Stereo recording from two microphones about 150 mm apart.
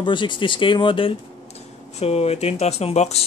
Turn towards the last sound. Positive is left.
turn(degrees=45)  # may be behind; listen again after turning